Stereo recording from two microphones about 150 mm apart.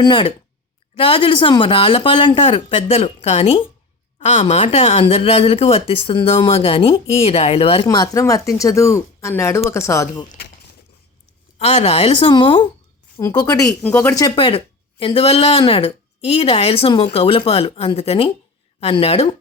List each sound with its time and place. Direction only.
0.0 s a woman's voice: 30° left (ahead or behind)
7.9 s speech: 25° left (ahead or behind)
10.2 s a sound: 90° left
11.5 s speech: 45° left (ahead or behind)
12.3 s a woman's voice: 30° left (ahead or behind)